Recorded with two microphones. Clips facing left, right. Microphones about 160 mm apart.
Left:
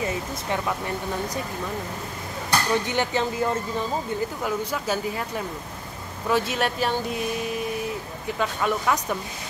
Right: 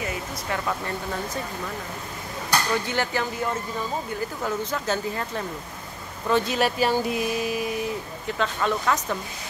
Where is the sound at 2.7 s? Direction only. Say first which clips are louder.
Left 2 dB; 20° left (ahead or behind).